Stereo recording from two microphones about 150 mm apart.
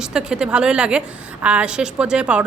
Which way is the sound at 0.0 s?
5° right (ahead or behind).